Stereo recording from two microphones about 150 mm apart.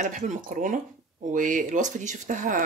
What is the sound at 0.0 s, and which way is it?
Speech, 55° right (ahead or behind).